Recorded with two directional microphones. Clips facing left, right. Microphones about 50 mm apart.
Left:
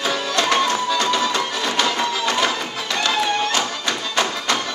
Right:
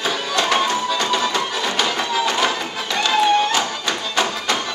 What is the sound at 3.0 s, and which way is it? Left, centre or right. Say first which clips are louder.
Music: right 4 dB; right.